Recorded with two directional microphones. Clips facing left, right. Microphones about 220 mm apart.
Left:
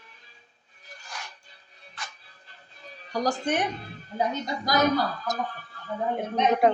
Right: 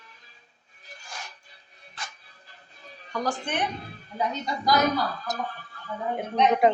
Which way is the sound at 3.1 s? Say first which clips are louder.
Left 3 dB; 40° left (ahead or behind).